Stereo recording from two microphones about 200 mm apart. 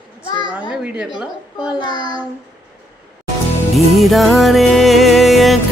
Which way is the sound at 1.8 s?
20° left (ahead or behind).